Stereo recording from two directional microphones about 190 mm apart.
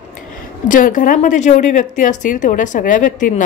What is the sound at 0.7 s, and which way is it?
Speech, 45° left (ahead or behind).